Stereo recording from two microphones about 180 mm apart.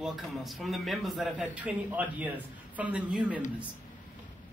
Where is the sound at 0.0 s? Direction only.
Centre (ahead or behind).